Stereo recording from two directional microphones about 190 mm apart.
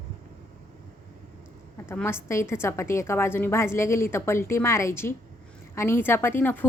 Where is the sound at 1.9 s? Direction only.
10° left (ahead or behind).